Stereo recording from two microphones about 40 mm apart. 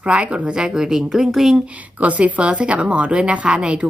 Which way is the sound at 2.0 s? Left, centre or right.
Right.